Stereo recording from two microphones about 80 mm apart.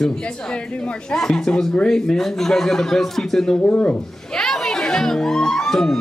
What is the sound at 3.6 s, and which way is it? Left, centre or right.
Speech, centre.